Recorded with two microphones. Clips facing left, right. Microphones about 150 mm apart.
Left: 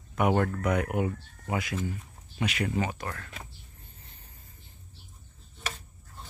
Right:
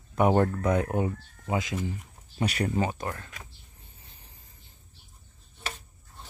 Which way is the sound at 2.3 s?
35° right (ahead or behind).